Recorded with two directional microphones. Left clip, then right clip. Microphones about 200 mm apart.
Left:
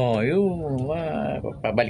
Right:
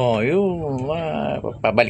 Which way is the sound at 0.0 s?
10° right (ahead or behind).